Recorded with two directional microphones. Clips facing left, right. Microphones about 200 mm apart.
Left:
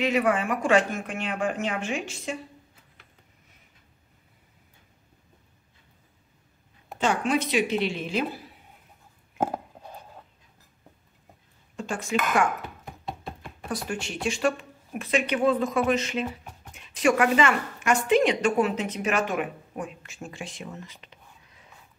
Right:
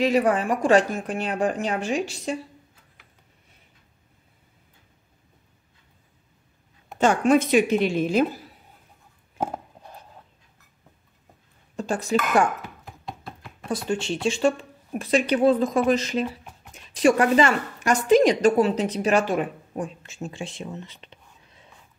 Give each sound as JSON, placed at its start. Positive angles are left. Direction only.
{"t": 0.0, "sound": "speech", "side_deg": -35}
{"t": 7.0, "sound": "a woman's voice", "side_deg": -45}
{"t": 11.7, "sound": "speech", "side_deg": -35}
{"t": 13.7, "sound": "a woman's voice", "side_deg": -25}